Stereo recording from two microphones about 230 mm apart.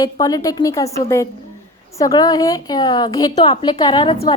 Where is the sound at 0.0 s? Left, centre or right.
Centre.